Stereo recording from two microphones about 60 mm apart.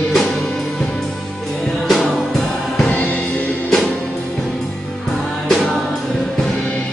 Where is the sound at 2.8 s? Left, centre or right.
Left.